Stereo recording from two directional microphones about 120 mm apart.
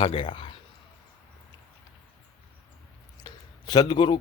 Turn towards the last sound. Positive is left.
turn(degrees=40)  # may be behind; listen again after turning